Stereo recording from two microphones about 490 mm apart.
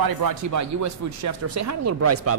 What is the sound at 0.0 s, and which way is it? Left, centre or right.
Speech, right.